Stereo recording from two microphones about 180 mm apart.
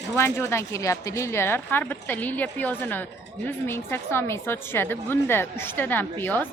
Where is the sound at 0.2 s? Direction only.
15° left (ahead or behind).